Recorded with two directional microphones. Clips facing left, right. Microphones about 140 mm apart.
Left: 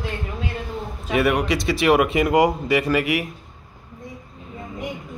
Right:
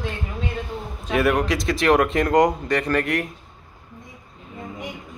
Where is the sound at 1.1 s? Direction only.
Centre (ahead or behind).